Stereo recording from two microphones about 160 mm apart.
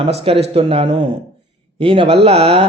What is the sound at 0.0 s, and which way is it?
Speech, 40° right (ahead or behind).